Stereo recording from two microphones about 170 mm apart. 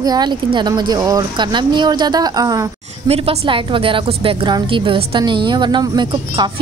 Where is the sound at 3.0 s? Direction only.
35° right (ahead or behind).